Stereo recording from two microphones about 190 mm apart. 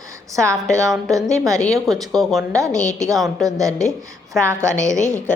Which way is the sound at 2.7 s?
15° right (ahead or behind).